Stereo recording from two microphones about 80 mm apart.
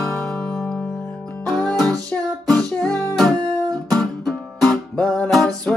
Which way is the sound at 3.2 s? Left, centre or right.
Right.